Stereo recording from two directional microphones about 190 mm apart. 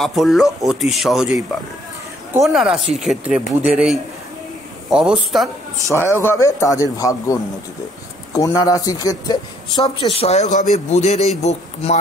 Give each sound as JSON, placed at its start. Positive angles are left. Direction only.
{"t": 0.0, "sound": "speech", "side_deg": 0}
{"t": 5.9, "sound": "a man's voice", "side_deg": 10}